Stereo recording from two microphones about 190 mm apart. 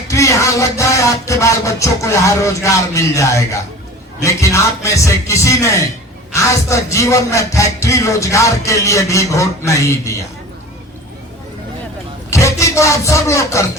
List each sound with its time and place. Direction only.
0.1 s a man's voice: 15° left (ahead or behind)
12.3 s music: 15° left (ahead or behind)